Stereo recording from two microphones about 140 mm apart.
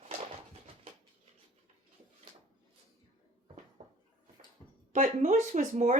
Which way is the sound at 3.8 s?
50° right (ahead or behind).